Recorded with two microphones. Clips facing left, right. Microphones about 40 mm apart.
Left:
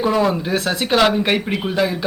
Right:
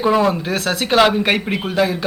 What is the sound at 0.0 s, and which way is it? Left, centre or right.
Speech, centre.